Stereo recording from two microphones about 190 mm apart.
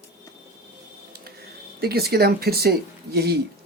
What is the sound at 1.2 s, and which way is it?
Speech, 55° right (ahead or behind).